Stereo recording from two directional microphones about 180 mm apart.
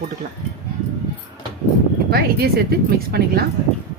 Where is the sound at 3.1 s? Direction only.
60° right (ahead or behind).